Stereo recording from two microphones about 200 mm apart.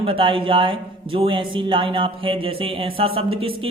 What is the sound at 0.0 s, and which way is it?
Speech, 25° right (ahead or behind).